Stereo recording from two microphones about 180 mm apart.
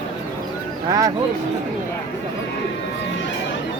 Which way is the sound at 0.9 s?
20° right (ahead or behind).